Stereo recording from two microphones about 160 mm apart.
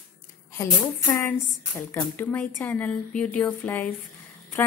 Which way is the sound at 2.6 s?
10° left (ahead or behind).